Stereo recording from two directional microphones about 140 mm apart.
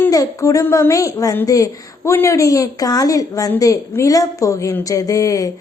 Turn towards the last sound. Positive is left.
turn(degrees=25)  # may be behind; listen again after turning